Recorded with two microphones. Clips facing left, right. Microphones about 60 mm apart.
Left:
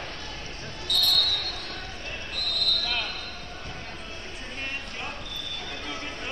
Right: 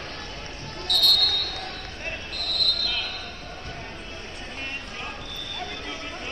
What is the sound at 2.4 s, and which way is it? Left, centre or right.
Basketball bounce, right.